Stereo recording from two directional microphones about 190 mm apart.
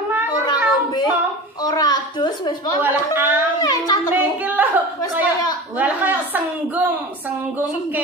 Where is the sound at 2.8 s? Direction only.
10° right (ahead or behind).